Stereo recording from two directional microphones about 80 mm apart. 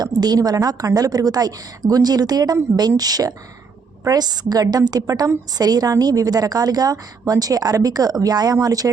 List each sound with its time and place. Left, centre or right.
0.0 s a woman's voice: right